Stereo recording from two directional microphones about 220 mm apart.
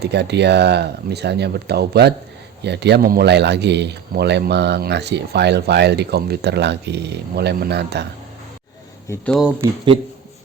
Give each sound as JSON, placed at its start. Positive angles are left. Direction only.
{"t": 0.0, "sound": "a man's voice", "side_deg": -50}
{"t": 9.0, "sound": "speech", "side_deg": 5}
{"t": 9.6, "sound": "speech", "side_deg": -20}